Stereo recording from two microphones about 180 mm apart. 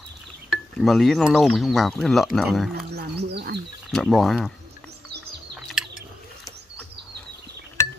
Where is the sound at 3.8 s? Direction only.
Centre (ahead or behind).